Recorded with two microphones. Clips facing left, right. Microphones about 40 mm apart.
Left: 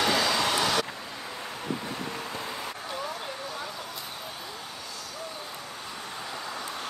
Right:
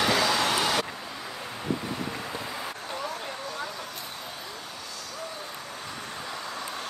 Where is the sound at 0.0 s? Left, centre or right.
Centre.